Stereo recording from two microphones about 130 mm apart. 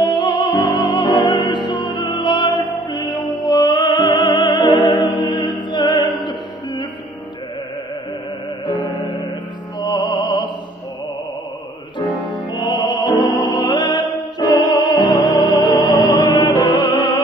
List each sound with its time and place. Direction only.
0.0 s music: 35° left (ahead or behind)
2.9 s opera: 35° left (ahead or behind)
4.7 s music: 35° left (ahead or behind)
9.8 s music: 35° left (ahead or behind)
12.1 s music: 35° left (ahead or behind)